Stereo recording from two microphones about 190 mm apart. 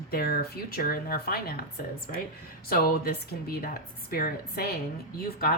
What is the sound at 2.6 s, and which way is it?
Speech, 50° left (ahead or behind).